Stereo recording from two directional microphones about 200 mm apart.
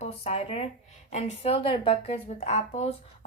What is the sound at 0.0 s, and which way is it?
A woman's voice, 30° left (ahead or behind).